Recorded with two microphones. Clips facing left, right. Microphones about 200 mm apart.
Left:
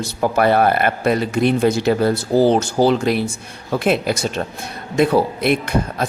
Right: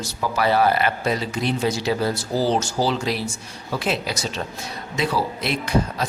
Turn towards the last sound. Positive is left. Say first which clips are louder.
# left 2 dB
turn(degrees=55)  # may be behind; listen again after turning